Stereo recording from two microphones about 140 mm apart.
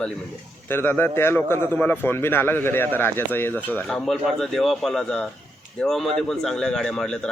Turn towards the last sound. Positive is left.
turn(degrees=5)  # may be behind; listen again after turning